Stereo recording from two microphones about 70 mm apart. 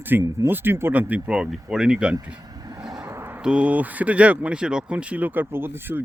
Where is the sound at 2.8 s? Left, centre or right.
Right.